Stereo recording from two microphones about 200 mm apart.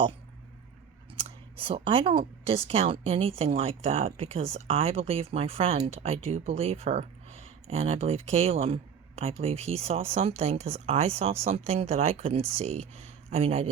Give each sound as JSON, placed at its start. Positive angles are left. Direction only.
{"t": 1.1, "sound": "speech", "side_deg": -30}